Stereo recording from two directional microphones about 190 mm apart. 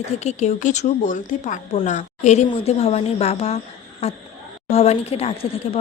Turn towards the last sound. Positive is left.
turn(degrees=30)  # may be behind; listen again after turning